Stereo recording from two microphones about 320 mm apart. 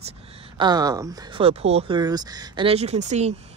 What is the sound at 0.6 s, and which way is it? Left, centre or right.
Speech, centre.